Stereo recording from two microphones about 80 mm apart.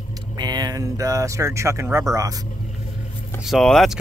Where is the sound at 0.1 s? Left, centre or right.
Right.